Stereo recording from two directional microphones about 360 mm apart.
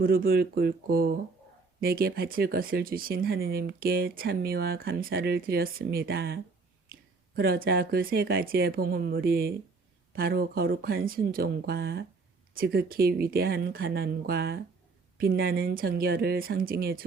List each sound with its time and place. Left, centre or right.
0.0 s speech: right